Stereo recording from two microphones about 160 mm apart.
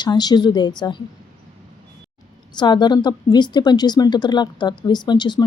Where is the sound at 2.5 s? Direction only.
25° left (ahead or behind).